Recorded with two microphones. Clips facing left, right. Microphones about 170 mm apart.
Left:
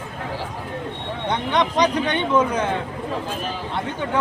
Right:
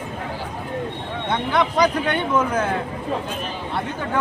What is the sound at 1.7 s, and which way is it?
Speech, 5° right (ahead or behind).